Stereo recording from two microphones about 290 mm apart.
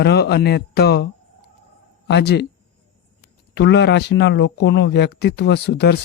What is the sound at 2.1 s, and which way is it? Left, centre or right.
Speech, left.